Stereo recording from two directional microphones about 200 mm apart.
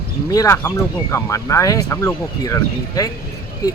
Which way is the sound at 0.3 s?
15° left (ahead or behind).